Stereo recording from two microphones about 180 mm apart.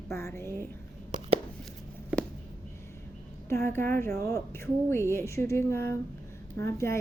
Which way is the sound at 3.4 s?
15° left (ahead or behind).